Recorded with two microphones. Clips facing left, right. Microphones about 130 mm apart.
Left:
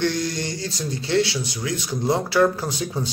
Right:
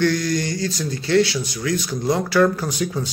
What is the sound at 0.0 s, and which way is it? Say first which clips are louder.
Speech: right 4 dB; 25° left (ahead or behind).